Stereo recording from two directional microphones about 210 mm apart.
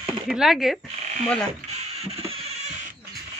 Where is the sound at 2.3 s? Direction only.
30° right (ahead or behind).